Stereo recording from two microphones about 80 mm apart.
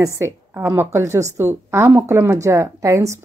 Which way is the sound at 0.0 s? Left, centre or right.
Right.